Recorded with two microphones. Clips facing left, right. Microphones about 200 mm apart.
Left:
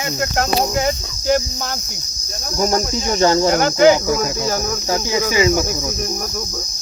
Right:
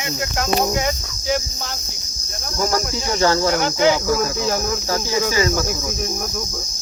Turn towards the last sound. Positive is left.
turn(degrees=15)  # may be behind; listen again after turning